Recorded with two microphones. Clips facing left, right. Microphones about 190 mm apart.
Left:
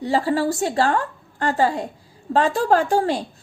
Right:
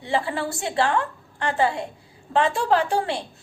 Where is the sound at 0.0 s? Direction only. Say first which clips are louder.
Left 5 dB; 40° left (ahead or behind).